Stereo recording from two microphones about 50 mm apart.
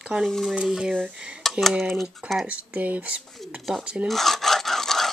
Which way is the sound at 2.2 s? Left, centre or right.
Right.